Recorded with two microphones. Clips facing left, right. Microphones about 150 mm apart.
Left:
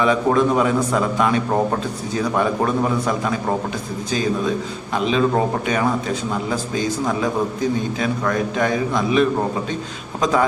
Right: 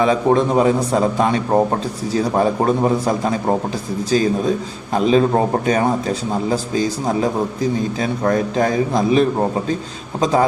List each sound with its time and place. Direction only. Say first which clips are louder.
0.0 s a man's voice: right 2 dB; 30° right (ahead or behind)